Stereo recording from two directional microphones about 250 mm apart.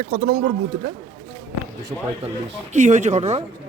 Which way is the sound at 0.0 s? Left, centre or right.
Right.